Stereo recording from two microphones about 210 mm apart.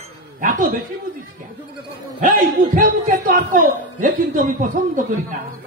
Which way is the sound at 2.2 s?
40° right (ahead or behind).